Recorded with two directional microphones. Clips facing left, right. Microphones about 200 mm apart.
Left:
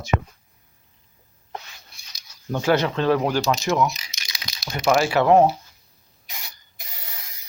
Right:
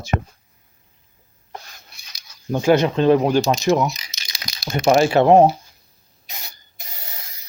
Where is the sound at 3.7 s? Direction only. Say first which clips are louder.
Right 4 dB; 30° right (ahead or behind).